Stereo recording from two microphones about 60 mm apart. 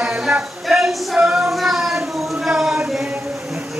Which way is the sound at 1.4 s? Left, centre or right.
Centre.